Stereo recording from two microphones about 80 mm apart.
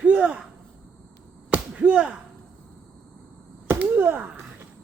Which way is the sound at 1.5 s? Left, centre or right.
Centre.